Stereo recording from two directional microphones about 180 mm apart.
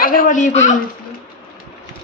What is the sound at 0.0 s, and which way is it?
Speech, 50° left (ahead or behind).